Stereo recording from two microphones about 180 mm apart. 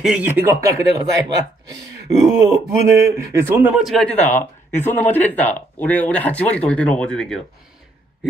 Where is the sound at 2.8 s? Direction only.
15° right (ahead or behind).